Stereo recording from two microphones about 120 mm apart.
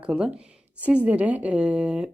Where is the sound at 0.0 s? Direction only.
10° right (ahead or behind).